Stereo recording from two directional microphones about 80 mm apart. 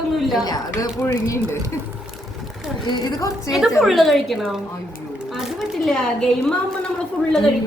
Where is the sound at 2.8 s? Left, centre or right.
Left.